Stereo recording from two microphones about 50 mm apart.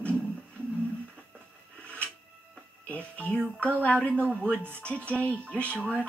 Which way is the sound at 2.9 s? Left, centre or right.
Left.